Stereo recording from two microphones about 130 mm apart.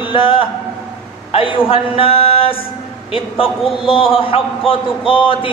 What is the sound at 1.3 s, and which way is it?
A man's voice, 45° left (ahead or behind).